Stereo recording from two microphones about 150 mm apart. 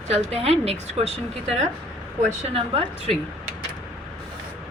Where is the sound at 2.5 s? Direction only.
40° right (ahead or behind).